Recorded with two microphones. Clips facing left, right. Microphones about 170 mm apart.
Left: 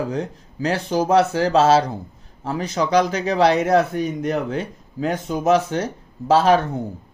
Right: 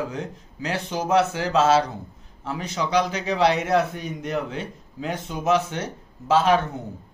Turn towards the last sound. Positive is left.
turn(degrees=35)  # may be behind; listen again after turning